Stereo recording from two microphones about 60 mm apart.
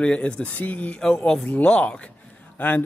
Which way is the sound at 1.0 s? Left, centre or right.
Centre.